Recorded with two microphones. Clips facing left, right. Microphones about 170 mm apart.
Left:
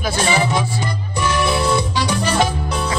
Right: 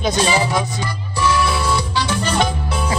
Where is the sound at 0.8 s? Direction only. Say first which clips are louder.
Right 1 dB; 20° left (ahead or behind).